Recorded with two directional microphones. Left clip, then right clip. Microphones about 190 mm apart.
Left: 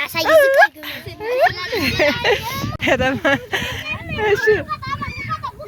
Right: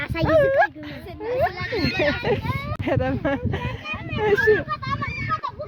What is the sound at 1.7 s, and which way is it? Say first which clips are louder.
Speech: left 5 dB; 10° left (ahead or behind).